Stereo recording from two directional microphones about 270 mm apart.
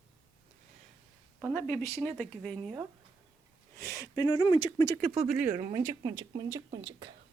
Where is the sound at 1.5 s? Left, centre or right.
Centre.